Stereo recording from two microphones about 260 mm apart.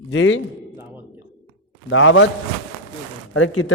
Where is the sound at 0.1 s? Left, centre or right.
Left.